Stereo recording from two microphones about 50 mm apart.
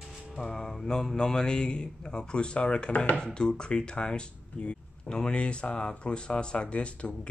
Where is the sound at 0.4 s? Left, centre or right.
Centre.